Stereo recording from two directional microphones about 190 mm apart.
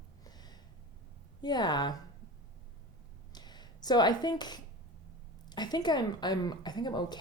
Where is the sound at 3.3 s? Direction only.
20° left (ahead or behind).